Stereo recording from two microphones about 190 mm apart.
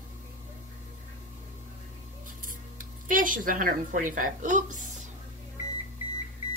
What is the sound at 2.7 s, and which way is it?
A woman's voice, 45° right (ahead or behind).